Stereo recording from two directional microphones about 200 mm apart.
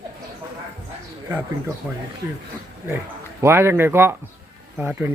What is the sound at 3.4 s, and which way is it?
Speech, 10° right (ahead or behind).